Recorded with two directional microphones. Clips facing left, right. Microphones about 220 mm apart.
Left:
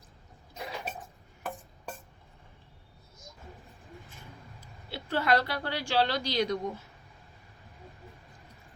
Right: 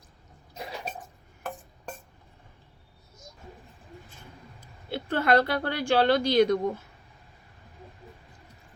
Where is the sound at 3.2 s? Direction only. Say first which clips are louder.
Right 2 dB; centre (ahead or behind).